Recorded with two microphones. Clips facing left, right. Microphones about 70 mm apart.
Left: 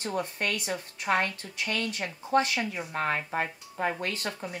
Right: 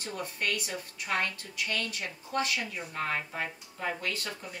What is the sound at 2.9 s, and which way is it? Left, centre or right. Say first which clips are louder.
Speech: left 4 dB; left.